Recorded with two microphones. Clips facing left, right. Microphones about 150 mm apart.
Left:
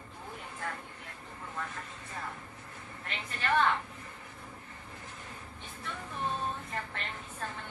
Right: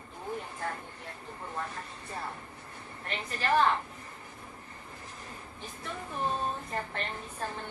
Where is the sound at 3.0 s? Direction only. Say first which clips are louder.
Right 3 dB; 35° right (ahead or behind).